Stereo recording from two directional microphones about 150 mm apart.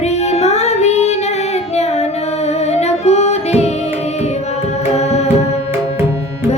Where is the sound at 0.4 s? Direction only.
45° left (ahead or behind).